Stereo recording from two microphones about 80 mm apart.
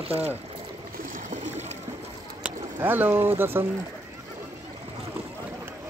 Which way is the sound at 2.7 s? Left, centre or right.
Right.